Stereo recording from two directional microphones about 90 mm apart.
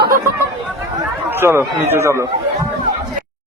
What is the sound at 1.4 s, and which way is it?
Speech, 30° right (ahead or behind).